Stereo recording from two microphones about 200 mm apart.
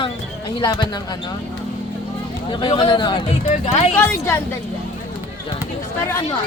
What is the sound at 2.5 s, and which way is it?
Speech, 20° left (ahead or behind).